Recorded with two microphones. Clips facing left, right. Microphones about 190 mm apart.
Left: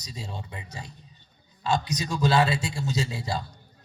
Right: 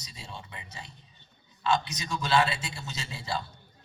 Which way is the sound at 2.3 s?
40° left (ahead or behind).